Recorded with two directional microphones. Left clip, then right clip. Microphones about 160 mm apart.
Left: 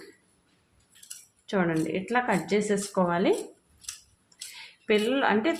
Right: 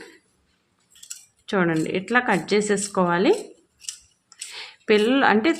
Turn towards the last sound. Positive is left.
turn(degrees=-50)  # may be behind; listen again after turning